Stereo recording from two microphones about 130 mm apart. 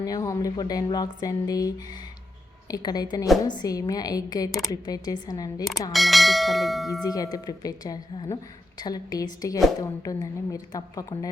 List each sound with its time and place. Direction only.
0.0 s a woman's voice: 25° left (ahead or behind)
5.9 s bell: centre (ahead or behind)
7.0 s speech: 30° left (ahead or behind)